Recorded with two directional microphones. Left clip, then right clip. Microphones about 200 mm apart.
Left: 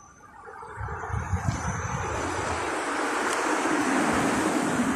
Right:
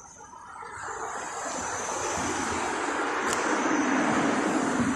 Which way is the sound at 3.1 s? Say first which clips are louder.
Left 2 dB; 55° left (ahead or behind).